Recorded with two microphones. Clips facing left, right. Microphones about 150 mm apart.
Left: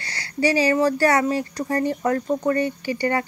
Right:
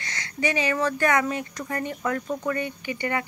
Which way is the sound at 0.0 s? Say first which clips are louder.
Left 5 dB; 35° left (ahead or behind).